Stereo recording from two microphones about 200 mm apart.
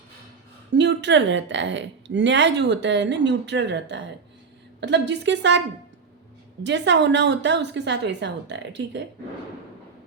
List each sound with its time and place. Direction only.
0.7 s a woman's voice: 60° right (ahead or behind)